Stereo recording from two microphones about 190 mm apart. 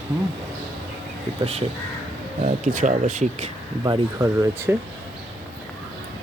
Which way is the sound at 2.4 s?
40° right (ahead or behind).